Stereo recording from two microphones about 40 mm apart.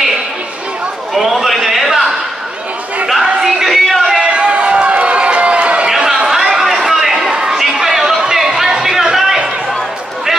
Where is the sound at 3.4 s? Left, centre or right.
Centre.